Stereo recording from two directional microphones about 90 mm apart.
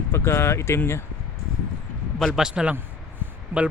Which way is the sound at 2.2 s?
Centre (ahead or behind).